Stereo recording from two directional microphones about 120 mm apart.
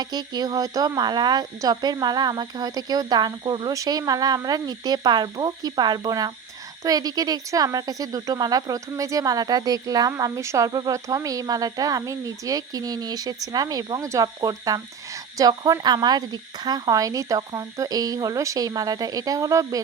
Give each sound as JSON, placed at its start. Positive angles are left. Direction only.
{"t": 0.0, "sound": "speech", "side_deg": -35}